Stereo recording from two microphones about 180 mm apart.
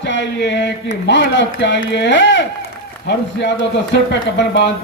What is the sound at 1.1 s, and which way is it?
A man's voice, 80° left.